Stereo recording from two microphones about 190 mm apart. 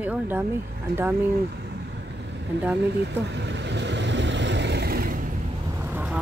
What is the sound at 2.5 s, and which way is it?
Speech, 65° right (ahead or behind).